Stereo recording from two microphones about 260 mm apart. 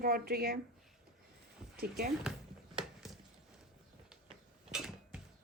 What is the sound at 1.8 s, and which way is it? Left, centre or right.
Speech, right.